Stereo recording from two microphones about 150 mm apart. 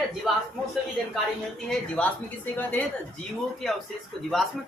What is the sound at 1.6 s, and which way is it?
Speech, 5° left (ahead or behind).